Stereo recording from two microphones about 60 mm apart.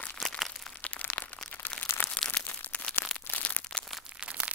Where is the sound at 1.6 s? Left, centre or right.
Left.